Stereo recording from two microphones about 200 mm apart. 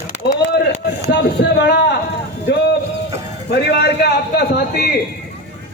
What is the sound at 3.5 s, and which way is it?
A man's voice, 55° left (ahead or behind).